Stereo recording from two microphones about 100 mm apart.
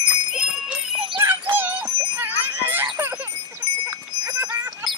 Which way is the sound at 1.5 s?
20° right (ahead or behind).